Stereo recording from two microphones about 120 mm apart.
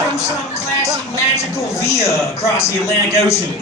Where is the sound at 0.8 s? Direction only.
25° left (ahead or behind).